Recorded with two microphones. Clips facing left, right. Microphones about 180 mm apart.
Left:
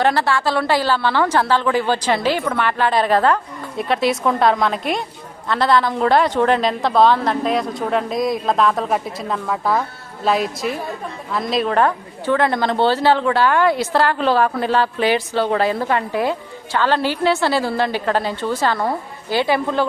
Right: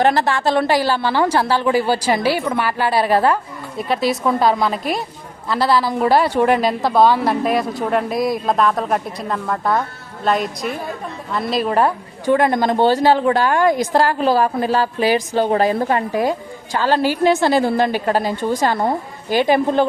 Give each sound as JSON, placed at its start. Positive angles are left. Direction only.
{"t": 0.0, "sound": "a woman's voice", "side_deg": -20}
{"t": 3.8, "sound": "a woman's voice", "side_deg": 0}
{"t": 13.2, "sound": "a woman's voice", "side_deg": -40}
{"t": 15.0, "sound": "a woman's voice", "side_deg": -40}
{"t": 16.9, "sound": "a woman's voice", "side_deg": -10}